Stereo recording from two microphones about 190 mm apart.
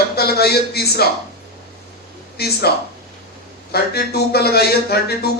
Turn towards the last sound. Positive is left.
turn(degrees=55)  # may be behind; listen again after turning